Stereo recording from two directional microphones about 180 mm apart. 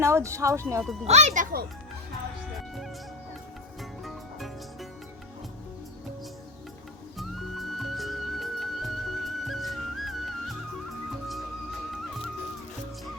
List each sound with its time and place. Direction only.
0.0 s speech: 15° right (ahead or behind)
1.0 s speech: 40° right (ahead or behind)
4.0 s music: centre (ahead or behind)
7.2 s music: centre (ahead or behind)